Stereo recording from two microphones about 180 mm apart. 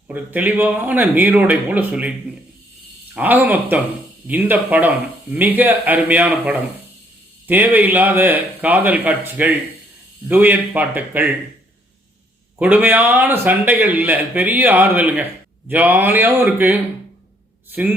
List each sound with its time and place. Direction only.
0.1 s a man's voice: 10° right (ahead or behind)
3.2 s a man's voice: 10° right (ahead or behind)
12.5 s a man's voice: 10° right (ahead or behind)